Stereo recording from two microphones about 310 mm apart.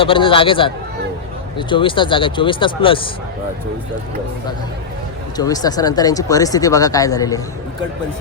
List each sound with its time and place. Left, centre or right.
0.0 s speech: centre
5.4 s speech: centre